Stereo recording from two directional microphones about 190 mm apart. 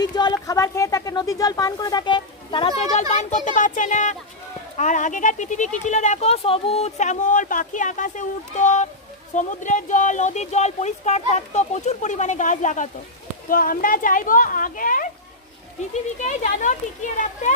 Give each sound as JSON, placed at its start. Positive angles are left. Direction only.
{"t": 0.0, "sound": "a woman's voice", "side_deg": 20}
{"t": 16.2, "sound": "speech", "side_deg": 40}